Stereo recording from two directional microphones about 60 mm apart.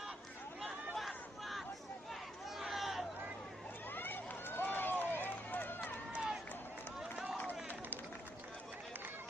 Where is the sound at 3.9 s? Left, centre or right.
Left.